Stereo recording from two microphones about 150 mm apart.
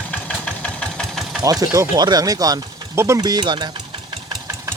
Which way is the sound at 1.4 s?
25° right (ahead or behind).